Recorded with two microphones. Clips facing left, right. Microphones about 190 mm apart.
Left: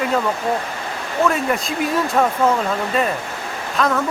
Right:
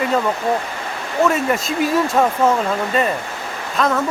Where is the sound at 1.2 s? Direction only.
Centre (ahead or behind).